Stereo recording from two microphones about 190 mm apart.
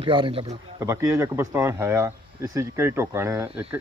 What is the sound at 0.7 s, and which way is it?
Speech, 15° right (ahead or behind).